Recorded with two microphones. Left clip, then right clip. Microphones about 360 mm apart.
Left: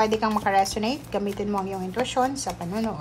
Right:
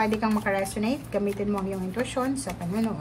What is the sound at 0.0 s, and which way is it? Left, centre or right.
A woman's voice, centre.